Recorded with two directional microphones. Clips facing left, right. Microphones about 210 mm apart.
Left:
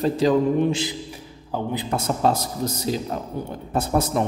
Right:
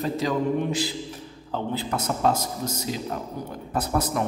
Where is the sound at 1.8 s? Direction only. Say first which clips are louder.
Left 3 dB; 30° left (ahead or behind).